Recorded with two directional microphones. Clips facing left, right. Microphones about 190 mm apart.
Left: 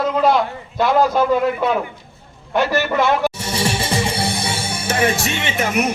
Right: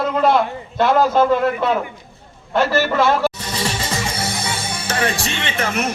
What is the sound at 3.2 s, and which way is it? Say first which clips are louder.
Music: left 1 dB; 15° left (ahead or behind).